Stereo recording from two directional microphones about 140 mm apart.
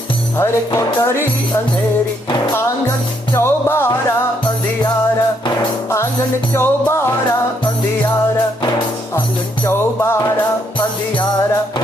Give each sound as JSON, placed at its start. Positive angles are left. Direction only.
{"t": 0.4, "sound": "speech", "side_deg": 20}
{"t": 3.3, "sound": "music", "side_deg": 20}
{"t": 6.5, "sound": "music", "side_deg": 20}